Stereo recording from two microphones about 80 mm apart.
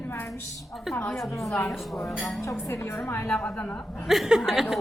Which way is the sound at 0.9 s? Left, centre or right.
Left.